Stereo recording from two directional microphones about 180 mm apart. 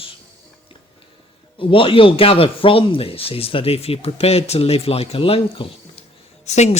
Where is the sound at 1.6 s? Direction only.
30° left (ahead or behind).